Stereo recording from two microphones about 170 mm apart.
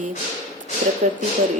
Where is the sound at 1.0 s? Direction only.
50° right (ahead or behind).